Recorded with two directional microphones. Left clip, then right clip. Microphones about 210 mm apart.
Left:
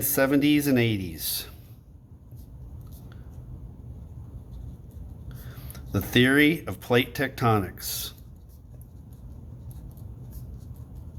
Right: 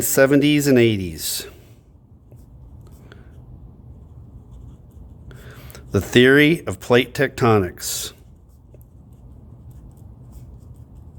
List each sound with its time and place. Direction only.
0.0 s speech: 45° right (ahead or behind)
5.3 s speech: 45° right (ahead or behind)